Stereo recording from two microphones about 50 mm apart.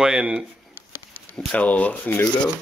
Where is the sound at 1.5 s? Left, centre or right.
Left.